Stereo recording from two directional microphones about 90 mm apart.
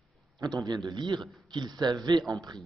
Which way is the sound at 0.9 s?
55° right (ahead or behind).